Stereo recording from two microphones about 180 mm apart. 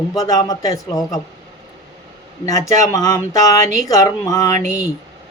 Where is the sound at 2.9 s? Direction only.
20° left (ahead or behind).